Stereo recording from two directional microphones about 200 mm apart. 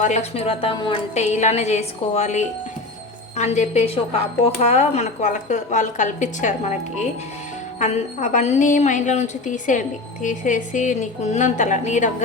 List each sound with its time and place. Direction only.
0.0 s a woman's voice: 35° left (ahead or behind)
7.8 s a woman's voice: 40° left (ahead or behind)